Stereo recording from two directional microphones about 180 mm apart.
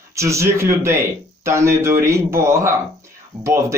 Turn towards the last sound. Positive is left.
turn(degrees=-15)  # may be behind; listen again after turning